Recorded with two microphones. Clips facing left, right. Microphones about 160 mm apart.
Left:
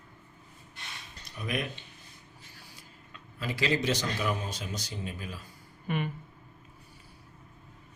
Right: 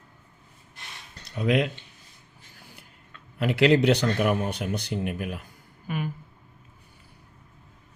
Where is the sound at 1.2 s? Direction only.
80° right.